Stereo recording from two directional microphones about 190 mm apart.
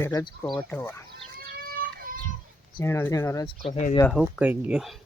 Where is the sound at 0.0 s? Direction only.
15° left (ahead or behind).